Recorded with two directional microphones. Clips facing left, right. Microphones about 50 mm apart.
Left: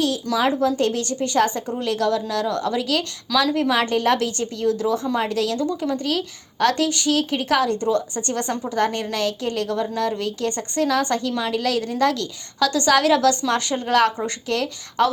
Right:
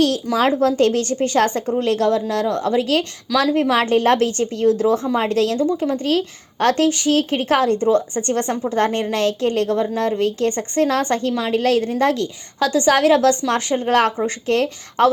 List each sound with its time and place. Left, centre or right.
0.3 s speech: right
5.5 s a woman's voice: right
6.0 s a woman's voice: right